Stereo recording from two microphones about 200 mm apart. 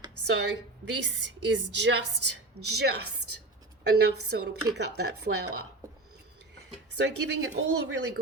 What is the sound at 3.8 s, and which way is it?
A woman's voice, 60° right (ahead or behind).